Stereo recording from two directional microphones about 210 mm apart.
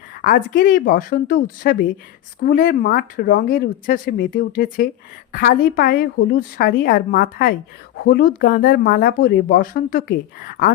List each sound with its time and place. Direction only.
0.2 s speech: 40° left (ahead or behind)